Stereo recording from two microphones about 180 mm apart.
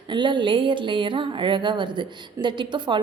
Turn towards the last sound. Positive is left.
turn(degrees=-25)  # may be behind; listen again after turning